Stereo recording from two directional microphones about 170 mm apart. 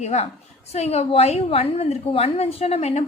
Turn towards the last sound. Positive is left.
turn(degrees=40)  # may be behind; listen again after turning